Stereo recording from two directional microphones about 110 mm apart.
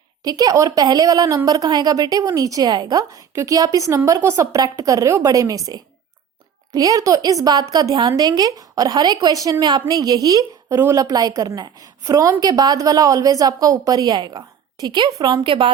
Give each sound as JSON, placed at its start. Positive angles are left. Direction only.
{"t": 0.3, "sound": "a woman's voice", "side_deg": -35}